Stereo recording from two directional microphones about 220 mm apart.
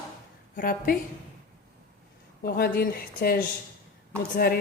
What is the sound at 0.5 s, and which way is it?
Speech, 40° left (ahead or behind).